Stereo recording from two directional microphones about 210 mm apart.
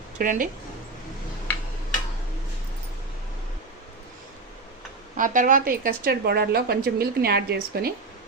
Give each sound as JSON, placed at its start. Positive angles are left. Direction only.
{"t": 0.2, "sound": "speech", "side_deg": -40}
{"t": 5.1, "sound": "a woman's voice", "side_deg": -40}